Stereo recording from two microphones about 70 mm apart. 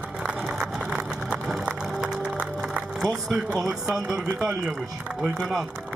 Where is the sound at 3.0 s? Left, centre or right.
Centre.